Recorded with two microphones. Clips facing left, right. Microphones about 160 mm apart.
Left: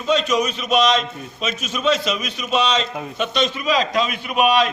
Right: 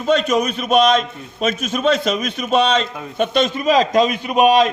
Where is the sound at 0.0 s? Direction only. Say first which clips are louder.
Right 3 dB; 50° right (ahead or behind).